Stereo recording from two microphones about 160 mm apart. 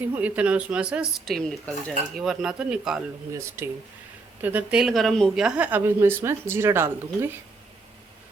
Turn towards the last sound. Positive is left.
turn(degrees=-15)  # may be behind; listen again after turning